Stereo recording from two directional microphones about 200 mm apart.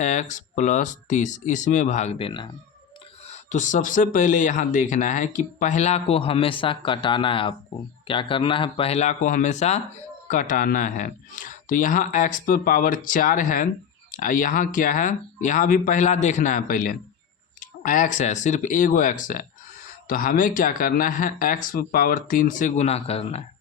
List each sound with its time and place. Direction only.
0.0 s speech: 35° left (ahead or behind)
3.2 s speech: 35° left (ahead or behind)